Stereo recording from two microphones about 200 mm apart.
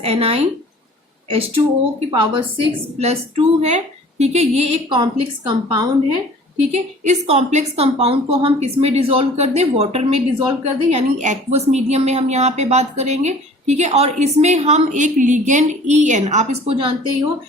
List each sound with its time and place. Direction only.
0.0 s a woman's voice: 30° right (ahead or behind)
6.7 s a woman's voice: 35° right (ahead or behind)